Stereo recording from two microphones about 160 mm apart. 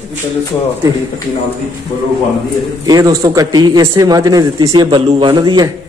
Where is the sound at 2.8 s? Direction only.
25° right (ahead or behind).